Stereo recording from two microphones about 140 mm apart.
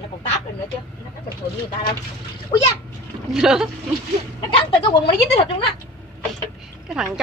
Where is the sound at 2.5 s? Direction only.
35° left (ahead or behind).